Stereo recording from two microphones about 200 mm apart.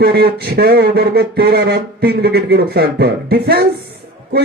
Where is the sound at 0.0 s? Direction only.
50° right (ahead or behind).